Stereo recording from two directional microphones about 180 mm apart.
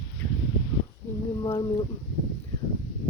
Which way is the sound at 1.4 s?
20° left (ahead or behind).